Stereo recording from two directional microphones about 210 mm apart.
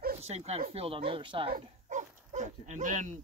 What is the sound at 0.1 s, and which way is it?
Speech, 30° right (ahead or behind).